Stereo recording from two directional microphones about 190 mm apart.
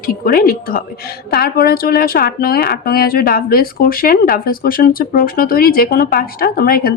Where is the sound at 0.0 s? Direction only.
50° left (ahead or behind).